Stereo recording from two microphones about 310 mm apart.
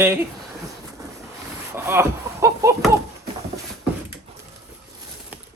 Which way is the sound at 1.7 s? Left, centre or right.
Centre.